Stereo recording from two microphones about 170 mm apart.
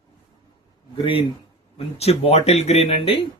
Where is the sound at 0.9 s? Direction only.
30° left (ahead or behind).